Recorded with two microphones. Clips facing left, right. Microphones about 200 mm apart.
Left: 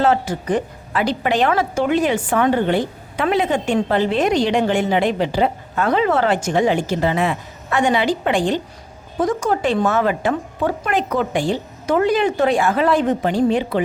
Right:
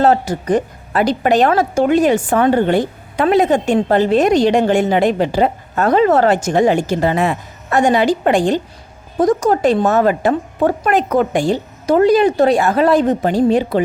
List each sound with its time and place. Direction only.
0.0 s a woman's voice: 40° right (ahead or behind)